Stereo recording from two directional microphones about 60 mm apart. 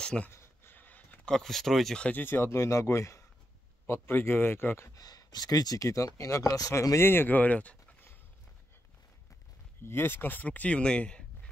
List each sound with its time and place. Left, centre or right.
0.3 s a sound: left
0.7 s a sound: left
1.2 s speech: centre
2.0 s speech: left
2.2 s speech: left
3.8 s speech: left
4.9 s speech: left
6.7 s speech: left
7.0 s speech: left
7.3 s speech: left
9.8 s speech: left; by 11.2 s centre